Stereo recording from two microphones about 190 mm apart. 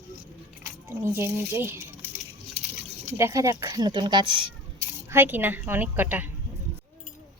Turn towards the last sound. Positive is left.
turn(degrees=-10)  # may be behind; listen again after turning